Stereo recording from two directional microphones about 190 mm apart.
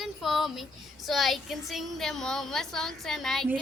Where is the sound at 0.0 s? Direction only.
Centre (ahead or behind).